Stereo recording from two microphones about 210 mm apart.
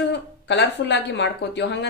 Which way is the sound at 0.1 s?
55° left (ahead or behind).